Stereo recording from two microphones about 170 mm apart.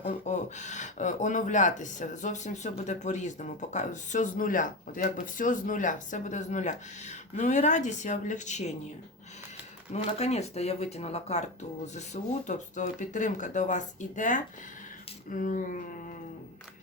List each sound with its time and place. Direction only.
0.0 s speech: 45° left (ahead or behind)
9.9 s speech: 35° left (ahead or behind); by 16.0 s 50° left (ahead or behind)